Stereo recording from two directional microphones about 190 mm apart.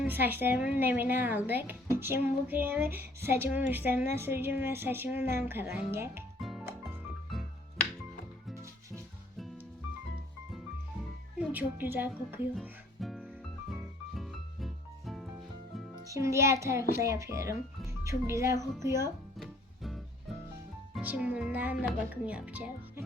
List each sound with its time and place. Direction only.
0.0 s speech: 10° right (ahead or behind)
6.4 s music: centre (ahead or behind)
11.3 s a woman's voice: 10° right (ahead or behind)
12.5 s music: centre (ahead or behind)
16.0 s speech: 15° right (ahead or behind)
19.4 s music: centre (ahead or behind)
20.9 s speech: 5° right (ahead or behind)